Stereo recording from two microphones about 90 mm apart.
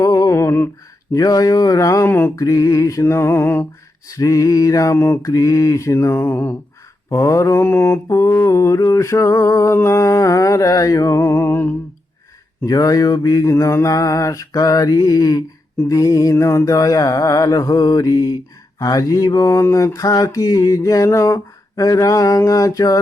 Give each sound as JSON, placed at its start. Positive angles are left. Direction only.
{"t": 0.0, "sound": "a sound", "side_deg": 35}
{"t": 1.1, "sound": "mantra", "side_deg": 45}
{"t": 2.0, "sound": "music", "side_deg": 25}
{"t": 2.3, "sound": "mantra", "side_deg": 40}
{"t": 4.1, "sound": "mantra", "side_deg": 40}
{"t": 4.9, "sound": "music", "side_deg": 25}
{"t": 5.2, "sound": "mantra", "side_deg": 40}
{"t": 7.1, "sound": "mantra", "side_deg": 35}
{"t": 11.2, "sound": "music", "side_deg": 25}
{"t": 12.6, "sound": "mantra", "side_deg": 40}